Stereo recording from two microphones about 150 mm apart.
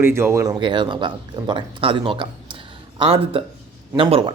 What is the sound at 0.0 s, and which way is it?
Speech, 15° right (ahead or behind).